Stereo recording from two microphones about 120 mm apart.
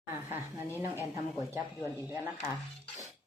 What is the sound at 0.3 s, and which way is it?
Speech, 20° right (ahead or behind).